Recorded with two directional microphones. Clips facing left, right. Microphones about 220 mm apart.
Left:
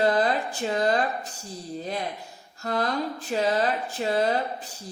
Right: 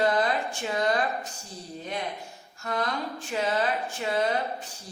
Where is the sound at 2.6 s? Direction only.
35° left (ahead or behind).